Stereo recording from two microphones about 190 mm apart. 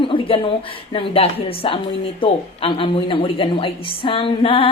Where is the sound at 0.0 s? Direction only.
25° left (ahead or behind).